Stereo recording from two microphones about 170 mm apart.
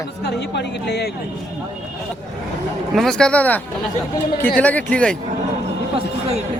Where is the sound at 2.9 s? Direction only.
5° left (ahead or behind).